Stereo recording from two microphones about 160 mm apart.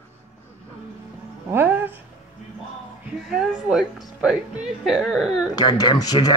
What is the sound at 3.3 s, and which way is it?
A woman's voice, 5° right (ahead or behind).